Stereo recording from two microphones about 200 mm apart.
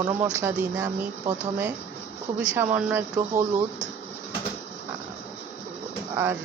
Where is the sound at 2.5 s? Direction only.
10° right (ahead or behind).